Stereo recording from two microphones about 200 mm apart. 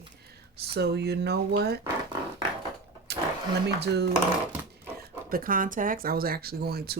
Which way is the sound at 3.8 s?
60° right (ahead or behind).